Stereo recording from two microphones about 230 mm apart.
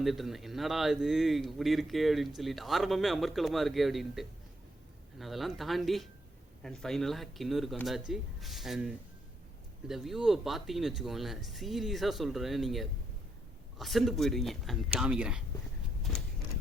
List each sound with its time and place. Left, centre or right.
0.0 s a man's voice: centre